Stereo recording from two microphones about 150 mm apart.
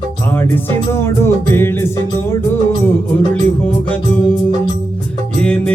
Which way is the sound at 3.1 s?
10° left (ahead or behind).